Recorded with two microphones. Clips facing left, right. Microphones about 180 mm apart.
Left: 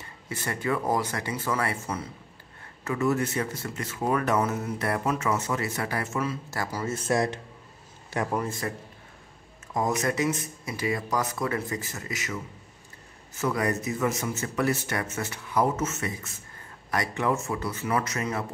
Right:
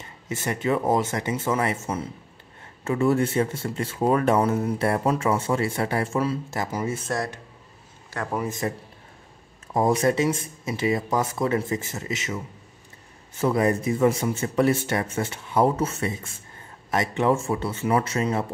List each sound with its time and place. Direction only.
0.0 s speech: 20° right (ahead or behind)
2.8 s speech: 30° right (ahead or behind)
6.6 s speech: 20° right (ahead or behind)
8.5 s speech: 20° right (ahead or behind)
9.8 s speech: 30° right (ahead or behind)